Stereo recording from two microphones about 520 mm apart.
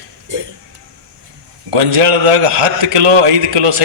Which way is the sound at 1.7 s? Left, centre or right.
Right.